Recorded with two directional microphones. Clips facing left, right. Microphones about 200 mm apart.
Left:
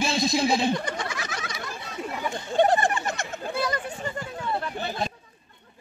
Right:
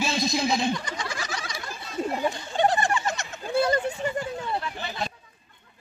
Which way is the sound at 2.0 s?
40° right (ahead or behind).